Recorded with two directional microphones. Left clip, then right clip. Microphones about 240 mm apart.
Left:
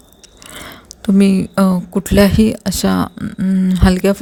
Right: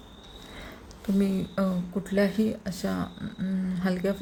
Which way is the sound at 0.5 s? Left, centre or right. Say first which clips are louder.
Left 15 dB; left.